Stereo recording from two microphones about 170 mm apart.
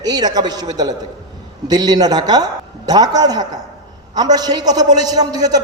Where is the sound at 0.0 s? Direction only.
25° right (ahead or behind).